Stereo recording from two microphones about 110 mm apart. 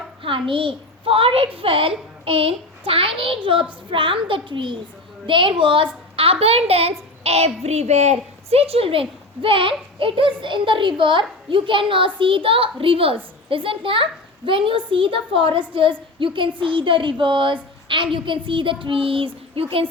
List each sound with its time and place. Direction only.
0.2 s a child's voice: 50° right (ahead or behind)
6.1 s a child's voice: 60° right (ahead or behind)